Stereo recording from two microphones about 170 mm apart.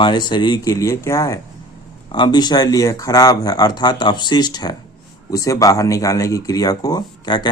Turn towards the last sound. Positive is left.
turn(degrees=25)  # may be behind; listen again after turning